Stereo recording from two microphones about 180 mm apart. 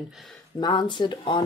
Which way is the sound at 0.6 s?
25° left (ahead or behind).